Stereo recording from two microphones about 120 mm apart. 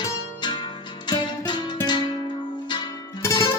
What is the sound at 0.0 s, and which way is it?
Music, 40° left (ahead or behind).